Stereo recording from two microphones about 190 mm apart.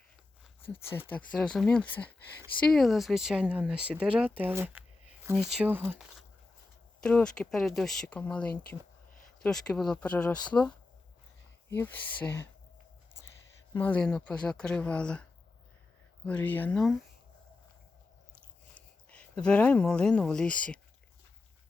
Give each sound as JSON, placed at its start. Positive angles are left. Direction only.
{"t": 0.6, "sound": "speech", "side_deg": 10}
{"t": 7.0, "sound": "speech", "side_deg": 5}
{"t": 11.7, "sound": "speech", "side_deg": 10}
{"t": 13.7, "sound": "speech", "side_deg": 10}
{"t": 19.1, "sound": "speech", "side_deg": 5}